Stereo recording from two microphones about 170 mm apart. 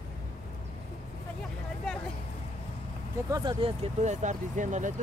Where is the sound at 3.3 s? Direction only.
25° right (ahead or behind); by 5.0 s 45° right (ahead or behind).